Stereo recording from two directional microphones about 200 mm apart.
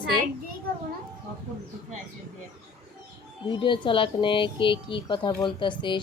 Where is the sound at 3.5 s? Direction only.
25° left (ahead or behind).